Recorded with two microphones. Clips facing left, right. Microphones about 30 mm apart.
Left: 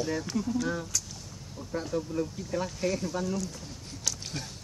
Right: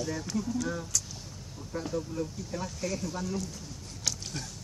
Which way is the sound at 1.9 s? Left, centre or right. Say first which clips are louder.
Left 3 dB; centre.